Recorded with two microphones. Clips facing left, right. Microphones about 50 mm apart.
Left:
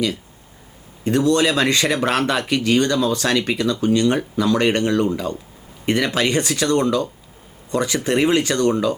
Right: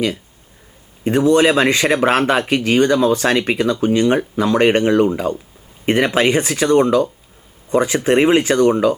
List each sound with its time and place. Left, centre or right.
1.0 s speech: right